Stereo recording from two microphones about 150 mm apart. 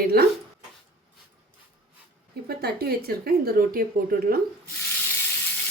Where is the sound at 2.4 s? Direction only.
90° right.